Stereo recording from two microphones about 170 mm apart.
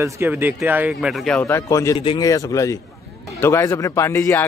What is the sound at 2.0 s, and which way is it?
Speech, 30° left (ahead or behind).